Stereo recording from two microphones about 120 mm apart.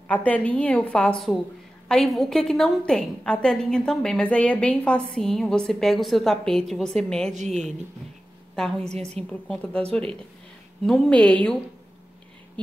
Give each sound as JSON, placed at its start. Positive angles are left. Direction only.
{"t": 0.1, "sound": "a woman's voice", "side_deg": 10}
{"t": 8.5, "sound": "a woman's voice", "side_deg": 5}